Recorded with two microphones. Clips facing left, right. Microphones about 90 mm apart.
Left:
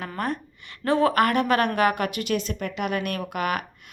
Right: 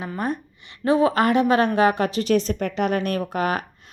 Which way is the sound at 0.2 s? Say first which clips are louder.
Right 1 dB; 20° right (ahead or behind).